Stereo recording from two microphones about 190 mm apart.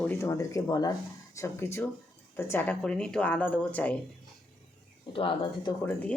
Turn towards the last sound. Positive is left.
turn(degrees=5)  # may be behind; listen again after turning